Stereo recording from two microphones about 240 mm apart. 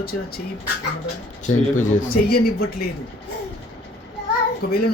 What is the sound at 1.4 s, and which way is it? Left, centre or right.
Speech, left.